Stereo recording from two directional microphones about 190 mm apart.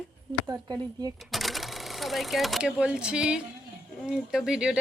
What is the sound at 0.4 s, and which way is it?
Speech, 20° right (ahead or behind).